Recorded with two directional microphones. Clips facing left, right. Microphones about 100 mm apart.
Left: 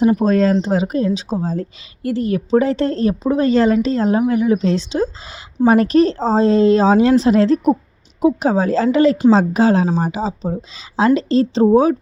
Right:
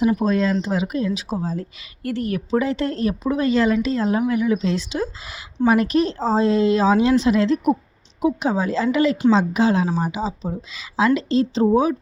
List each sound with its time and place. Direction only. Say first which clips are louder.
0.0 s speech: left 5 dB; 40° left (ahead or behind)
2.0 s speech: left 5 dB; 25° left (ahead or behind)